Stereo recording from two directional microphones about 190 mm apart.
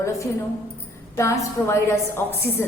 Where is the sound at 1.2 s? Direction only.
15° left (ahead or behind).